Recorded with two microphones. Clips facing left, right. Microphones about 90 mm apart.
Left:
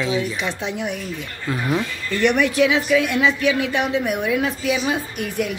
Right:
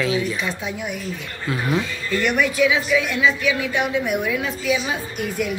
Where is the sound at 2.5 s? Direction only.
55° left (ahead or behind).